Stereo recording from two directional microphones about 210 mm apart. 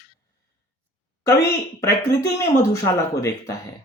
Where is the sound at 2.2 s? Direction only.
15° left (ahead or behind).